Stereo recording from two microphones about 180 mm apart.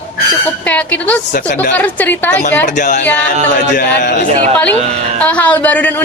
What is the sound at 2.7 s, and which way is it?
Speech, 45° left (ahead or behind).